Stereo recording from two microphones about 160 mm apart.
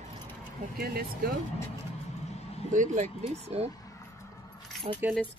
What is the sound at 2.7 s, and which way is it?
Speech, 50° right (ahead or behind).